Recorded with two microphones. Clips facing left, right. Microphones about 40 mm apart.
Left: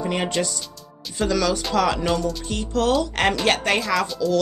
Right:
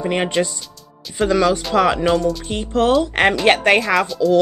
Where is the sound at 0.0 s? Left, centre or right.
Right.